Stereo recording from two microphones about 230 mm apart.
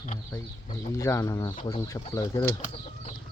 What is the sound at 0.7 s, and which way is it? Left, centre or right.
Speech, centre.